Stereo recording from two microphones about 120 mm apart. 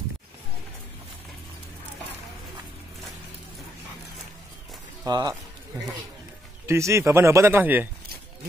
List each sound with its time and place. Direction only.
5.0 s speech: 30° right (ahead or behind)
6.6 s speech: 25° right (ahead or behind)